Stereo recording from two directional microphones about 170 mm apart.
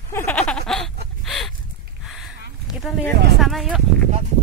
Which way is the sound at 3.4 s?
Centre (ahead or behind).